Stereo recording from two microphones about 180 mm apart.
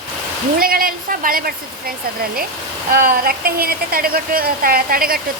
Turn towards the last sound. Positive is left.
turn(degrees=-55)  # may be behind; listen again after turning